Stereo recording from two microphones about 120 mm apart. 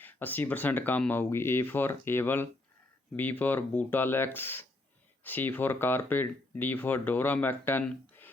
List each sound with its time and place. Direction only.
0.0 s speech: 15° left (ahead or behind)